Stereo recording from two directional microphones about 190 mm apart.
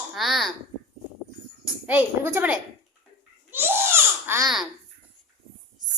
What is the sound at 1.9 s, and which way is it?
Speech, 10° right (ahead or behind).